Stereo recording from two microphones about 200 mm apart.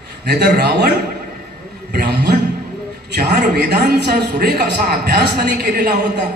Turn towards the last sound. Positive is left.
turn(degrees=-55)  # may be behind; listen again after turning